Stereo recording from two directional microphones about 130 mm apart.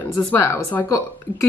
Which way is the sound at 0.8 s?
25° left (ahead or behind).